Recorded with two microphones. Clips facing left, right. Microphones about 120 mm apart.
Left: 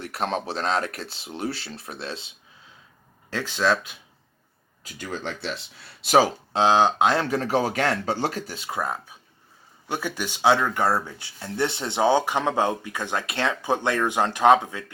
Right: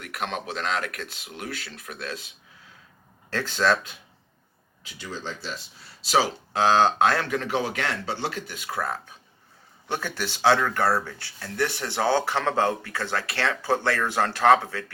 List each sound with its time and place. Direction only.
0.0 s speech: 35° left (ahead or behind)
3.2 s speech: 15° left (ahead or behind)
4.8 s speech: 45° left (ahead or behind)
6.5 s speech: 20° left (ahead or behind)
7.3 s speech: 35° left (ahead or behind)
8.8 s speech: 15° left (ahead or behind)